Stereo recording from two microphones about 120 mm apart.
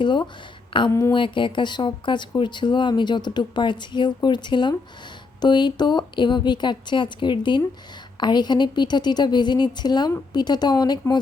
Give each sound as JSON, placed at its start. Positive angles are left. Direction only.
{"t": 0.0, "sound": "speech", "side_deg": 40}
{"t": 0.9, "sound": "speech", "side_deg": 20}
{"t": 1.1, "sound": "speech", "side_deg": 40}